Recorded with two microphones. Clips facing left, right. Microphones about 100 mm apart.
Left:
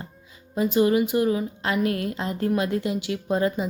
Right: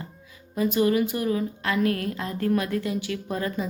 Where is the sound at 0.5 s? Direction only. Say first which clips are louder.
Left 2 dB; 25° left (ahead or behind).